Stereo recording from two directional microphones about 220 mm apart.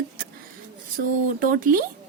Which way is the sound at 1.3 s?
40° right (ahead or behind).